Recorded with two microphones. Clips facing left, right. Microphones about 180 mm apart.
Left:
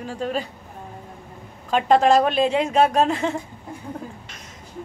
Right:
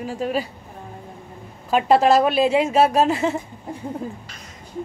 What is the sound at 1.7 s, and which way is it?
A woman's voice, 5° right (ahead or behind).